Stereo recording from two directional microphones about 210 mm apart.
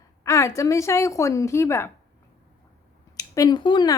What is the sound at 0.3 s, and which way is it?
A woman's voice, 15° left (ahead or behind).